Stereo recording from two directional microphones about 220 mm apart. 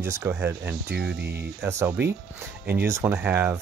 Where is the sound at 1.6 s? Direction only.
10° right (ahead or behind).